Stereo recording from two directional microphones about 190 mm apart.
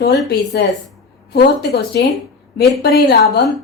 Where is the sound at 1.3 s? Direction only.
60° left (ahead or behind).